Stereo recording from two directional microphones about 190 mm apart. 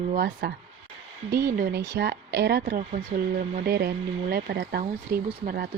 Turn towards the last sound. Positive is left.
turn(degrees=-50)  # may be behind; listen again after turning